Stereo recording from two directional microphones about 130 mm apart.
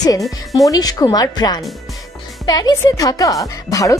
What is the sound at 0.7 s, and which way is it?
Speech, 30° left (ahead or behind).